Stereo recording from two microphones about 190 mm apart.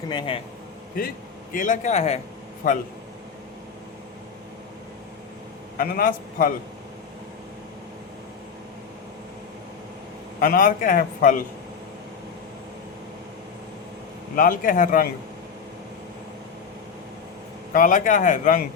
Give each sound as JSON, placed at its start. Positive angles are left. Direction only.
{"t": 0.1, "sound": "a man's voice", "side_deg": 25}
{"t": 1.0, "sound": "a man's voice", "side_deg": 50}
{"t": 5.7, "sound": "a man's voice", "side_deg": 50}
{"t": 10.4, "sound": "a man's voice", "side_deg": 50}
{"t": 14.3, "sound": "a man's voice", "side_deg": 45}
{"t": 17.7, "sound": "a man's voice", "side_deg": 45}